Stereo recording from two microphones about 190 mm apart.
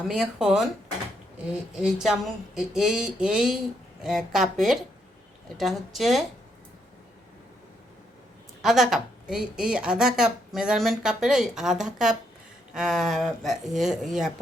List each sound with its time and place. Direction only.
0.1 s a woman's voice: centre (ahead or behind)
8.6 s a woman's voice: centre (ahead or behind)